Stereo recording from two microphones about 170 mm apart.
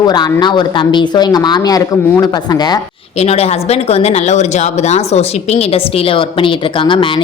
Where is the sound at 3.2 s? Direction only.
35° left (ahead or behind).